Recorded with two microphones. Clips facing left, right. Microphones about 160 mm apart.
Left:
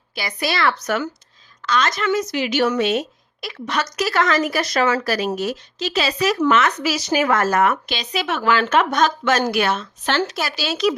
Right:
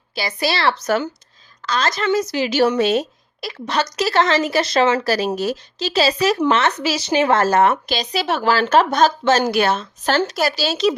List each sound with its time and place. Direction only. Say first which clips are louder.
0.1 s speech: right 2 dB; 30° right (ahead or behind)